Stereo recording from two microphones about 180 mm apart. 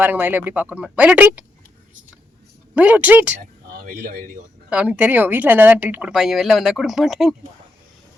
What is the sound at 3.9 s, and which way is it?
Speech, 55° right (ahead or behind).